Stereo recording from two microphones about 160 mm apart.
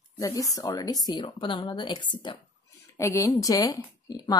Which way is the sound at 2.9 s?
20° left (ahead or behind).